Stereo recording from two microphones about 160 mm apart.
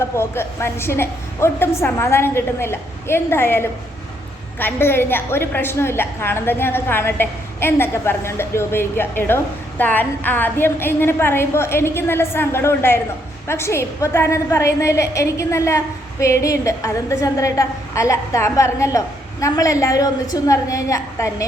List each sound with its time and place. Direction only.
0.0 s a woman's voice: 15° left (ahead or behind)